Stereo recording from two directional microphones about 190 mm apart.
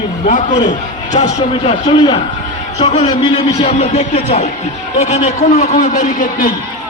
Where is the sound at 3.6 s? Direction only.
35° left (ahead or behind).